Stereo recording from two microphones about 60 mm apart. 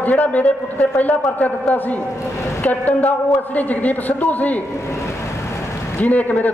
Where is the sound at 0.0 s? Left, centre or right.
Left.